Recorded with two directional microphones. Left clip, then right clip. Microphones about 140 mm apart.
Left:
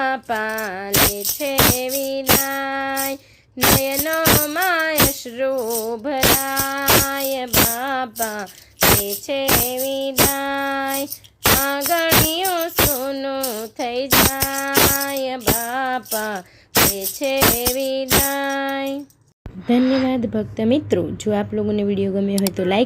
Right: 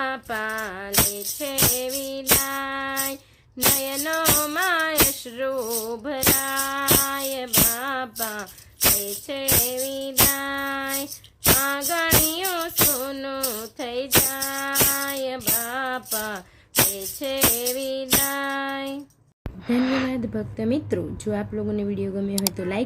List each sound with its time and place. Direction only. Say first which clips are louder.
0.0 s music: left 6 dB; 25° left (ahead or behind)
5.4 s a woman's voice: left 5 dB; 20° left (ahead or behind)
5.8 s music: left 6 dB; 25° left (ahead or behind)
9.0 s a woman's voice: left 7 dB; 25° left (ahead or behind)
11.9 s music: left 7 dB; 20° left (ahead or behind)
13.0 s insect: left 5 dB; 20° left (ahead or behind)
16.9 s a woman's voice: left 7 dB; 25° left (ahead or behind)